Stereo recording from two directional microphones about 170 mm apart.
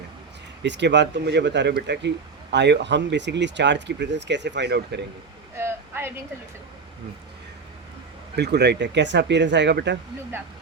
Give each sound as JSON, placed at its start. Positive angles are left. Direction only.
{"t": 0.6, "sound": "speech", "side_deg": -90}
{"t": 5.5, "sound": "a sound", "side_deg": -15}
{"t": 8.4, "sound": "speech", "side_deg": -80}